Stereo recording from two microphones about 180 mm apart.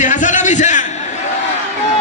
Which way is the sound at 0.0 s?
45° left (ahead or behind).